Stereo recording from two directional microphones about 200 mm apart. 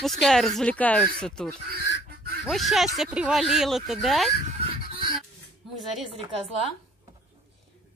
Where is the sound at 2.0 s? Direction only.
50° right (ahead or behind).